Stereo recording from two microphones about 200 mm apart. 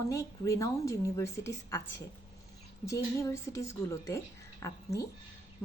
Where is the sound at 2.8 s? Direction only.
15° left (ahead or behind).